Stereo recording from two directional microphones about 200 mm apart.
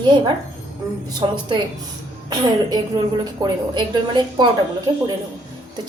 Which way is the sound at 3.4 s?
15° right (ahead or behind).